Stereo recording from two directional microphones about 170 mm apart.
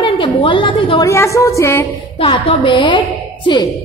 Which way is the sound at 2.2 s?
30° left (ahead or behind).